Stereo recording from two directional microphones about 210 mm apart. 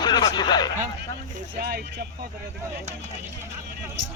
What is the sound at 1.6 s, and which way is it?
Speech, 50° right (ahead or behind).